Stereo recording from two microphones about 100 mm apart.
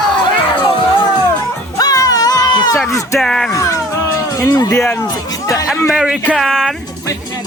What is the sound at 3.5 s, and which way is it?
Cat, 30° left (ahead or behind).